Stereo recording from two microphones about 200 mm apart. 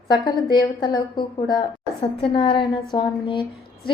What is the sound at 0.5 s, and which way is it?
Speech, 20° left (ahead or behind).